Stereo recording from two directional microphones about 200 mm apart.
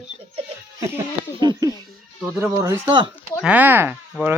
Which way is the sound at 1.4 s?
20° right (ahead or behind).